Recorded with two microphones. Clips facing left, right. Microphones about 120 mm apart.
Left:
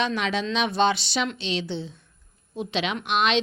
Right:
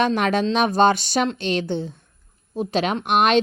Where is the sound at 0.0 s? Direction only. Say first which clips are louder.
Right 6 dB; 50° right (ahead or behind).